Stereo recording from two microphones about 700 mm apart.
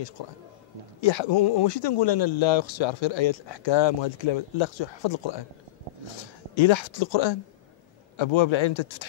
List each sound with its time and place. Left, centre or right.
1.0 s speech: left
6.5 s speech: left